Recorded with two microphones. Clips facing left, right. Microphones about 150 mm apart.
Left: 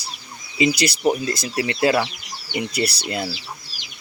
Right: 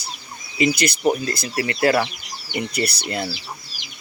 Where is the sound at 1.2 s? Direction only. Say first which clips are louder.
Left 1 dB; 15° left (ahead or behind).